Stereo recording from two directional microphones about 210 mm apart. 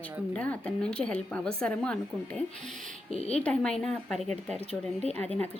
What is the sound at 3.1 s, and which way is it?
Speech, 30° left (ahead or behind).